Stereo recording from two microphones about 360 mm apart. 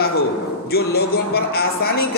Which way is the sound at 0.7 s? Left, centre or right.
Left.